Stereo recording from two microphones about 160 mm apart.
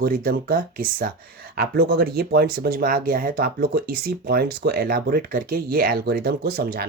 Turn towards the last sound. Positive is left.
turn(degrees=-70)  # may be behind; listen again after turning